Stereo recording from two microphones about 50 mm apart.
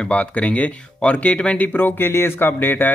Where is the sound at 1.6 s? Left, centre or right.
Left.